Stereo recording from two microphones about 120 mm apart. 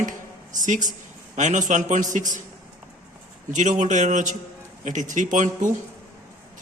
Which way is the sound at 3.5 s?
90° right.